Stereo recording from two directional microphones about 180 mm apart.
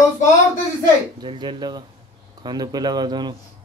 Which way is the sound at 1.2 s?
25° right (ahead or behind).